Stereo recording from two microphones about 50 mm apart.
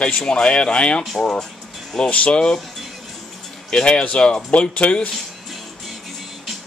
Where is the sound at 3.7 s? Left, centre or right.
Centre.